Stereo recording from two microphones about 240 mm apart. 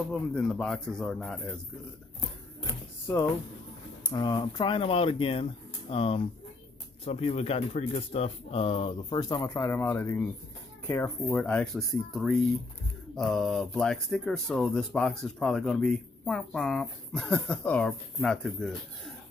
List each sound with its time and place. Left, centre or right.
0.1 s speech: centre
2.6 s speech: centre